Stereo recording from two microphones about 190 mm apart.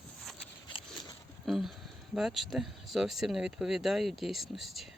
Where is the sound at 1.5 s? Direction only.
Centre (ahead or behind).